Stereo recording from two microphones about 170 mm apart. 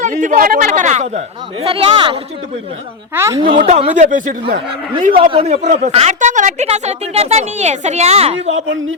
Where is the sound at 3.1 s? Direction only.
15° right (ahead or behind).